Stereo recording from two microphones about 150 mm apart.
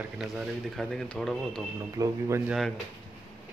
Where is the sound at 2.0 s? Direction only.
20° right (ahead or behind).